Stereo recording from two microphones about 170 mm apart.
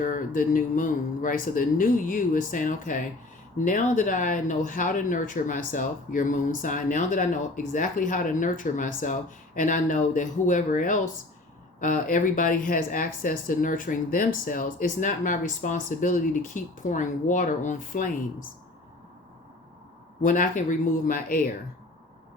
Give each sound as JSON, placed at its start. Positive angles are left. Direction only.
{"t": 0.0, "sound": "speech", "side_deg": 50}
{"t": 20.2, "sound": "speech", "side_deg": 50}